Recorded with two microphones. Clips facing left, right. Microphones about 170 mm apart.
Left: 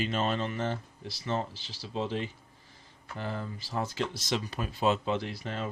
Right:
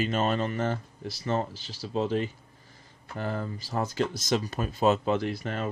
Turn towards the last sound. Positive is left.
turn(degrees=-55)  # may be behind; listen again after turning